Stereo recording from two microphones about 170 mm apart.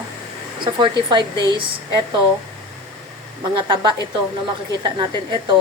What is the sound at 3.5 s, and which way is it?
A woman's voice, 25° right (ahead or behind).